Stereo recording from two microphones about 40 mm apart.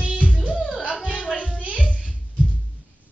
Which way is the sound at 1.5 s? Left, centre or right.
Right.